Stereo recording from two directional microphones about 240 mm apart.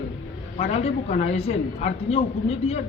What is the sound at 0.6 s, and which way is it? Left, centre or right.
A woman's voice, left.